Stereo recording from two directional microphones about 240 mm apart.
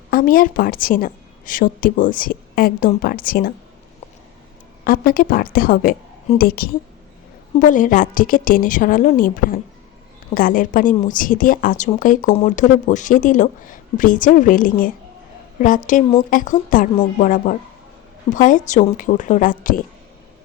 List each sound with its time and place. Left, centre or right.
0.1 s speech: left
4.9 s speech: left